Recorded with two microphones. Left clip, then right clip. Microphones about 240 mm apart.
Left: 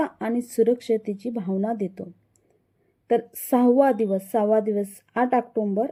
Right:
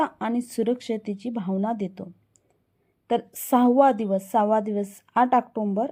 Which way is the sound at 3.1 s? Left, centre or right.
Centre.